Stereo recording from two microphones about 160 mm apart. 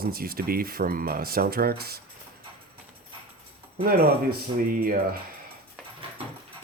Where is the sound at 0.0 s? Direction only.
65° right (ahead or behind).